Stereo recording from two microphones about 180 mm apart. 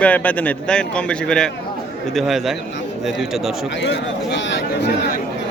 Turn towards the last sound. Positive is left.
turn(degrees=85)